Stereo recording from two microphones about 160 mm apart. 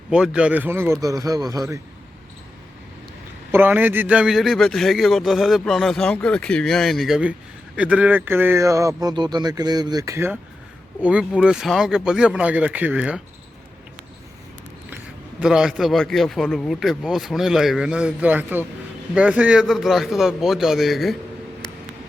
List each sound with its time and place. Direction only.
0.1 s a man's voice: 5° right (ahead or behind)
3.5 s a man's voice: 10° right (ahead or behind)
15.4 s a man's voice: 5° right (ahead or behind)